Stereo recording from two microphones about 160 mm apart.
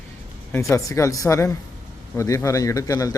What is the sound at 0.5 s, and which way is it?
Speech, 20° left (ahead or behind).